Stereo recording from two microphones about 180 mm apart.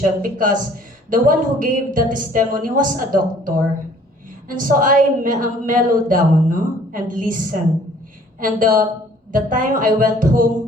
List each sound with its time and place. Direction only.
0.0 s a woman's voice: 50° right (ahead or behind)